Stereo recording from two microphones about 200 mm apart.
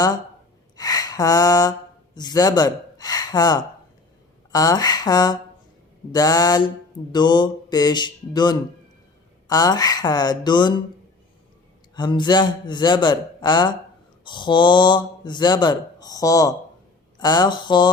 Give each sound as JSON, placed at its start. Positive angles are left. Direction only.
{"t": 0.8, "sound": "a sound", "side_deg": 20}
{"t": 2.1, "sound": "speech", "side_deg": 20}
{"t": 11.9, "sound": "speech", "side_deg": 20}